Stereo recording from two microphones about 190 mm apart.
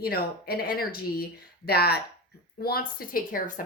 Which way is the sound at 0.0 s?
55° left (ahead or behind).